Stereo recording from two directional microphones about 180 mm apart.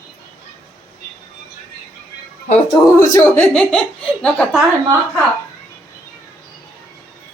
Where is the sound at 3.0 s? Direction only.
15° left (ahead or behind).